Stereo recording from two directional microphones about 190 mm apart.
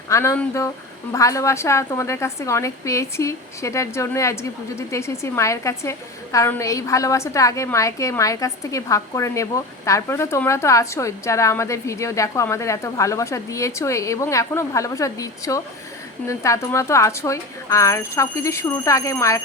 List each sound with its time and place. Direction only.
0.1 s a woman's voice: 15° left (ahead or behind)